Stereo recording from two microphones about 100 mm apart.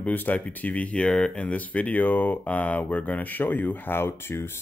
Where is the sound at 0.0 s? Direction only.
15° left (ahead or behind).